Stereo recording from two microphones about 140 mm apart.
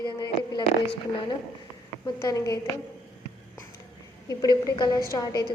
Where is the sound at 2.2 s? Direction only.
25° left (ahead or behind).